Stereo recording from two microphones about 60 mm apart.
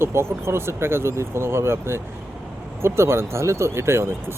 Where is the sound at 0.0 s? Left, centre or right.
Right.